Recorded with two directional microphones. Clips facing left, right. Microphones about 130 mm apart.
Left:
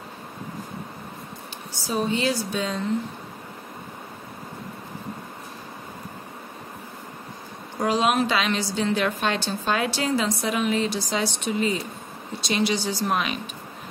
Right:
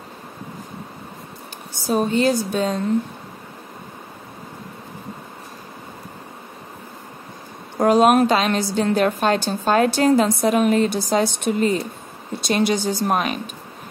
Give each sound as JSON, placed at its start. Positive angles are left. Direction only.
{"t": 1.7, "sound": "a woman's voice", "side_deg": -50}
{"t": 7.8, "sound": "a woman's voice", "side_deg": -50}